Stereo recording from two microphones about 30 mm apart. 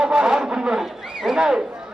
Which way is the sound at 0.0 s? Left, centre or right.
Right.